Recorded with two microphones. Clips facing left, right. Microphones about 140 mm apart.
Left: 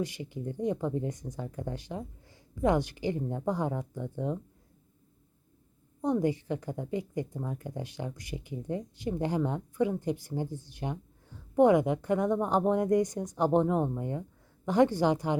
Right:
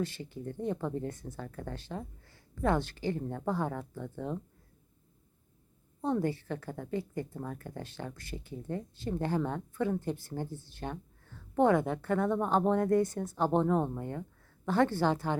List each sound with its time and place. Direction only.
0.0 s speech: 15° left (ahead or behind)
6.0 s speech: 15° left (ahead or behind)